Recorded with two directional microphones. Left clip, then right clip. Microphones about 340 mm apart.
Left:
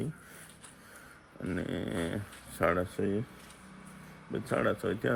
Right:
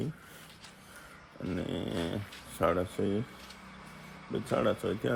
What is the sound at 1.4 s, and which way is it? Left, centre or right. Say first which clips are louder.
Speech: even; centre.